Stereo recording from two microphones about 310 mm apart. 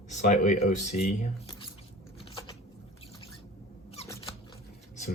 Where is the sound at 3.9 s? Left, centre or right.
Centre.